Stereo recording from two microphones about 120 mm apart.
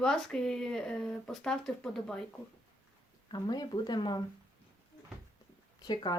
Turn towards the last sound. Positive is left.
turn(degrees=35)  # may be behind; listen again after turning